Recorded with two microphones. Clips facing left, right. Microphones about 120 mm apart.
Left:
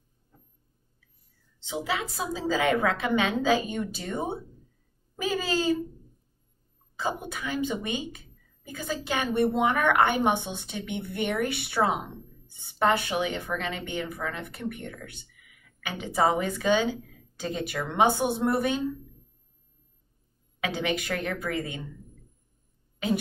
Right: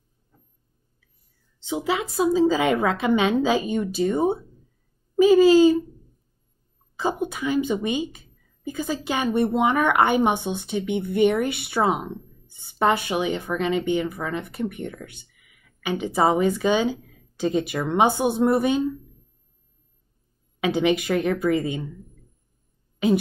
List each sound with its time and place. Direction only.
1.7 s a woman's voice: 15° right (ahead or behind)
5.2 s a woman's voice: 15° right (ahead or behind)
7.0 s a woman's voice: 20° right (ahead or behind)
20.6 s a woman's voice: 15° right (ahead or behind)